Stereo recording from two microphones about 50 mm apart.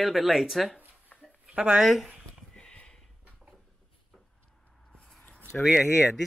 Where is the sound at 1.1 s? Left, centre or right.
Left.